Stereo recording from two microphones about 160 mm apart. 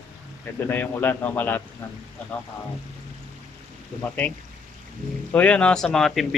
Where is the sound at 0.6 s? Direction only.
10° left (ahead or behind).